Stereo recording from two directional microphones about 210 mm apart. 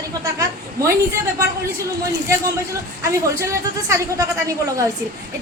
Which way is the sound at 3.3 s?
15° right (ahead or behind).